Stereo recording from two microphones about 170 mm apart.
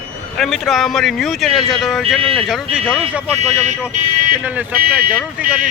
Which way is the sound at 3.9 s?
50° right (ahead or behind).